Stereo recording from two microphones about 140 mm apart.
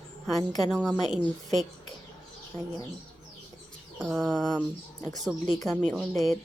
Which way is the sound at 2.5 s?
20° left (ahead or behind).